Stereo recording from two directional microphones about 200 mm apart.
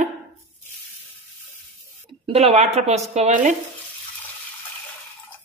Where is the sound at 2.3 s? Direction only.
30° right (ahead or behind).